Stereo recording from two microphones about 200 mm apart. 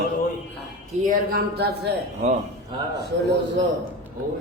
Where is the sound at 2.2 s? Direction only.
35° right (ahead or behind).